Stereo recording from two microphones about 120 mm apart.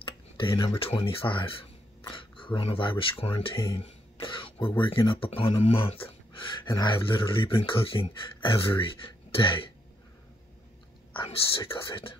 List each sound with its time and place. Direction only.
0.0 s speech: 45° left (ahead or behind)
11.9 s speech: 50° left (ahead or behind)